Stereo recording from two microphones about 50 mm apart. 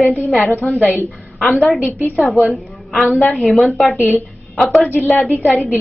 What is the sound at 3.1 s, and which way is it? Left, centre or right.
Speech, left.